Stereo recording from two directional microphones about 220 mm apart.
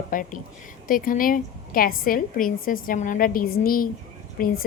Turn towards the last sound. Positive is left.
turn(degrees=40)  # may be behind; listen again after turning